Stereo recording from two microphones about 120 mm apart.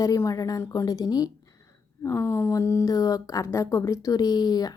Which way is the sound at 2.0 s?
20° left (ahead or behind).